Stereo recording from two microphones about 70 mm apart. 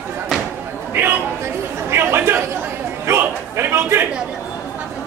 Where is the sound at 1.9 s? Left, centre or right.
Right.